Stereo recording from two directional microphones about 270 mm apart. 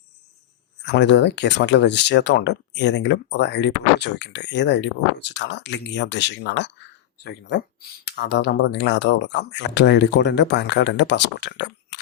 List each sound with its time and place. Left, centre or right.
0.9 s speech: left